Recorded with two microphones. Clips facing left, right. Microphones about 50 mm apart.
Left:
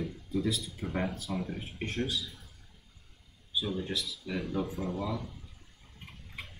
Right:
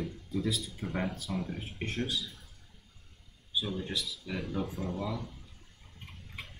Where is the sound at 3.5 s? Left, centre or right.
Centre.